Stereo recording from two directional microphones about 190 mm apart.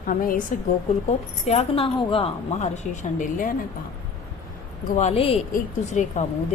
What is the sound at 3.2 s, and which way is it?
Speech, 45° left (ahead or behind).